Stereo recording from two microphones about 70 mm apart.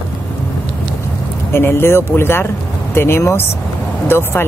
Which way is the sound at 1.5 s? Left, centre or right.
Left.